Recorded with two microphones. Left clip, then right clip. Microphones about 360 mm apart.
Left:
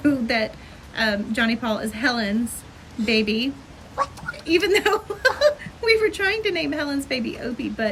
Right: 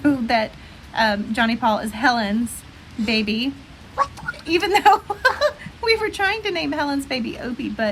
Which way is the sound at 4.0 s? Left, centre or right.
Centre.